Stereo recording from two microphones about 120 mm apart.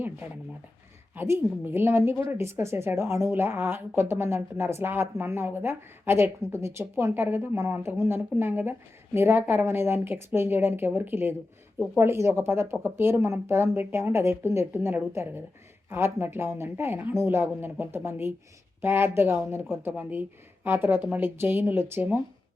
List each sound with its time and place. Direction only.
1.1 s a woman's voice: 20° right (ahead or behind)